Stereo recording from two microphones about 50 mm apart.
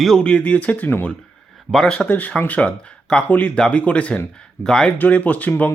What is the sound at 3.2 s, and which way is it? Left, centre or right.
Speech, left.